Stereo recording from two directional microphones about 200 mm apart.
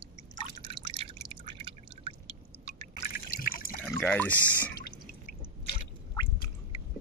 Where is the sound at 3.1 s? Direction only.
45° left (ahead or behind).